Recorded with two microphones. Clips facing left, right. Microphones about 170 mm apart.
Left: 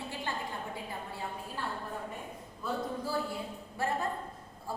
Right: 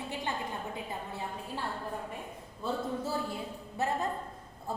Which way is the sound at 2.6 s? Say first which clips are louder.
Right 1 dB; 25° right (ahead or behind).